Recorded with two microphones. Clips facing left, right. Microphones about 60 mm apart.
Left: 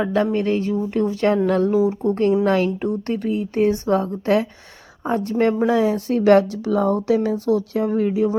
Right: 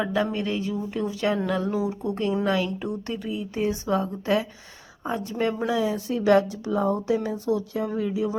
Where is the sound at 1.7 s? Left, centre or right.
Left.